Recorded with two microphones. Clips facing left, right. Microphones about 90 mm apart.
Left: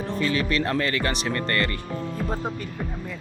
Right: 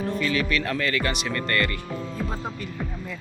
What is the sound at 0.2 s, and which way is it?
Speech, 35° left (ahead or behind).